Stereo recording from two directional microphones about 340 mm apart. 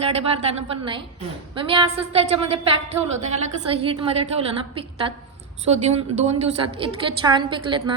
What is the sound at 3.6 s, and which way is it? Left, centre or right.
A woman's voice, centre.